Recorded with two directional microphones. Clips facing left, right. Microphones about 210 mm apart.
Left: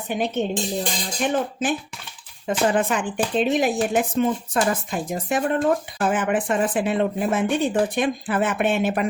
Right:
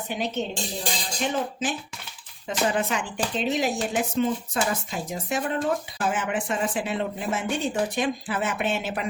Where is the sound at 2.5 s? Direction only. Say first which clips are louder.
Left 5 dB; 50° left (ahead or behind).